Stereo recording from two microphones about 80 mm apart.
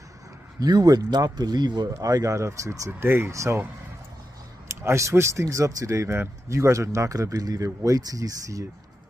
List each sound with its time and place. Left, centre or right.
0.6 s speech: right
1.9 s speech: right
2.9 s speech: right
4.6 s speech: right